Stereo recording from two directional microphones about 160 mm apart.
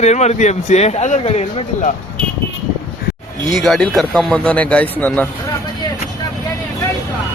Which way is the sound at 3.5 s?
Centre (ahead or behind).